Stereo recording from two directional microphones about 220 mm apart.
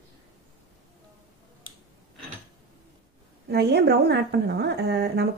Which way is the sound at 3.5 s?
45° right (ahead or behind).